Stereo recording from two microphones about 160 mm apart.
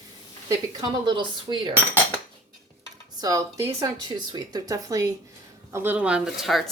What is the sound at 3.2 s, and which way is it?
A woman's voice, 20° right (ahead or behind).